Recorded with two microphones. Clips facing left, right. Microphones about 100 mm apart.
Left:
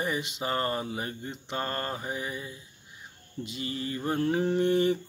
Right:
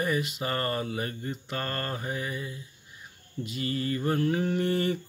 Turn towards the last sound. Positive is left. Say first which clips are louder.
# left 3 dB
turn(degrees=20)  # may be behind; listen again after turning